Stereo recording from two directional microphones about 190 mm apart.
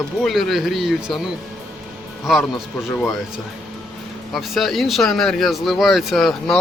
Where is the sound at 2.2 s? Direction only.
Centre (ahead or behind).